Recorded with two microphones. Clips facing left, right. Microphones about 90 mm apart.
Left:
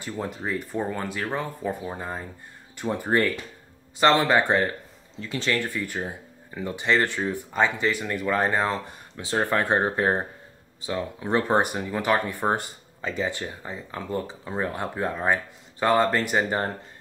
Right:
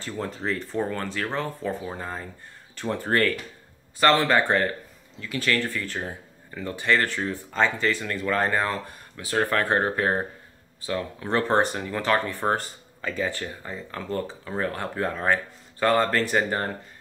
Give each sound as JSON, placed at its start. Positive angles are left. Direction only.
{"t": 0.0, "sound": "speech", "side_deg": 15}